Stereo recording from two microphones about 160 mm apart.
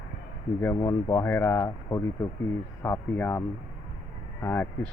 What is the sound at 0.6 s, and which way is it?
Speech, 20° left (ahead or behind).